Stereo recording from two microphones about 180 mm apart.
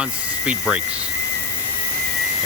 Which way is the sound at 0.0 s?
5° right (ahead or behind).